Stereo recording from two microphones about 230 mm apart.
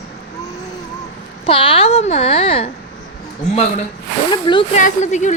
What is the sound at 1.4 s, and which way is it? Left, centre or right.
Speech, left.